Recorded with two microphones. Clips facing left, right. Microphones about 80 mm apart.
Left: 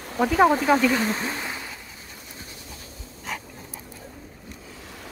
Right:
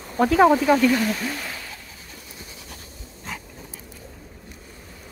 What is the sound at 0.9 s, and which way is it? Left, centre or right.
Speech, left.